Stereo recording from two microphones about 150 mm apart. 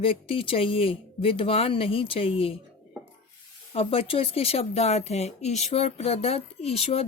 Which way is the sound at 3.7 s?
40° left (ahead or behind).